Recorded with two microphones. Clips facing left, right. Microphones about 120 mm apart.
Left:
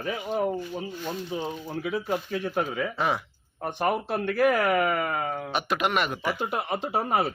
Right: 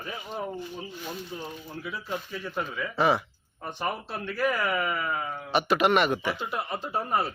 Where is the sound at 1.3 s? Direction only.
90° left.